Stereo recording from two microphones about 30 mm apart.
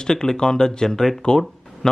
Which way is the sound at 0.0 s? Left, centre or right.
Centre.